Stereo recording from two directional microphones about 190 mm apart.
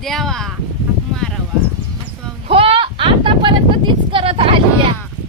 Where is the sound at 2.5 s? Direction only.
30° right (ahead or behind).